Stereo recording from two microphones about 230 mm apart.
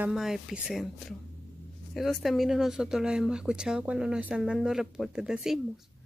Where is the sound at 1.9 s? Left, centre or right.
Centre.